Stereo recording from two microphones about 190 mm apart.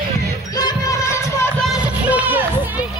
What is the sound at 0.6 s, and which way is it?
Music, 20° left (ahead or behind).